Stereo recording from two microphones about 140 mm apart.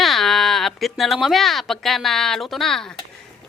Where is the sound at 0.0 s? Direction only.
Centre (ahead or behind).